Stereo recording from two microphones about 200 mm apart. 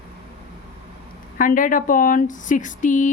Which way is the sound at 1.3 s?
40° left (ahead or behind).